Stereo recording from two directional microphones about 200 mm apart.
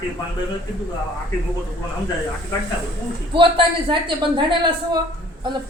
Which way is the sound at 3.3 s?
25° right (ahead or behind).